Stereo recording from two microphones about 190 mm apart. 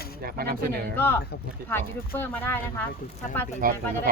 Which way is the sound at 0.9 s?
10° left (ahead or behind).